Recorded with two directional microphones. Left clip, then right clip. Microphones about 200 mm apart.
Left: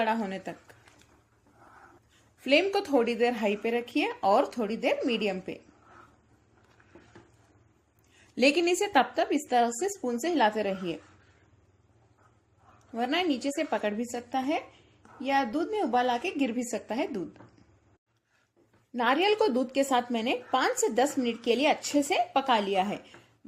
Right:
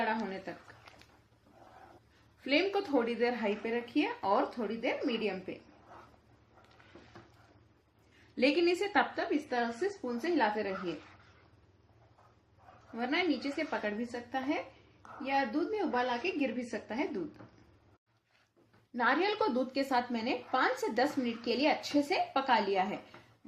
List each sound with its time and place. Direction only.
0.0 s speech: 50° left (ahead or behind)
2.4 s speech: 50° left (ahead or behind)
8.4 s speech: 45° left (ahead or behind)
13.0 s speech: 45° left (ahead or behind)
18.9 s a woman's voice: 40° left (ahead or behind)